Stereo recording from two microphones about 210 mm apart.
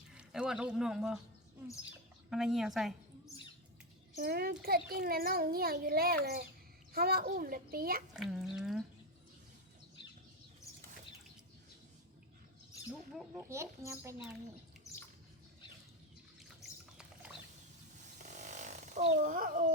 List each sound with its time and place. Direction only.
0.1 s speech: 5° right (ahead or behind)
2.3 s a woman's voice: centre (ahead or behind)
4.2 s a child's voice: 45° right (ahead or behind)
8.1 s speech: centre (ahead or behind)
10.7 s bird flight: 15° left (ahead or behind)
13.3 s speech: 15° right (ahead or behind)
18.2 s a sound: 35° right (ahead or behind)